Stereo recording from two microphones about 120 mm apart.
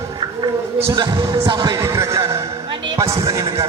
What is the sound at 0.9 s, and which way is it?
Speech, 40° right (ahead or behind).